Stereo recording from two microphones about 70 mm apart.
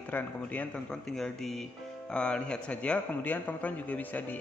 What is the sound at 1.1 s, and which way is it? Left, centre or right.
A man's voice, centre.